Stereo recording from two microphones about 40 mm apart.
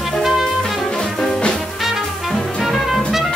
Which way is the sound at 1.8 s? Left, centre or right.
Centre.